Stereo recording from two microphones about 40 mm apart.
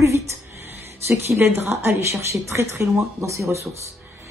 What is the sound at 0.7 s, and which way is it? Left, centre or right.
Speech, right.